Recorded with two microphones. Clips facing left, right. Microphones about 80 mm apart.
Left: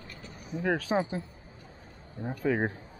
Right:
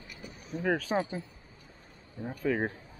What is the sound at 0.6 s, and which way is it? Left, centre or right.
Speech, centre.